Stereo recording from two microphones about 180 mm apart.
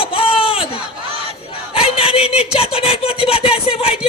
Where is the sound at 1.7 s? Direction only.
30° left (ahead or behind).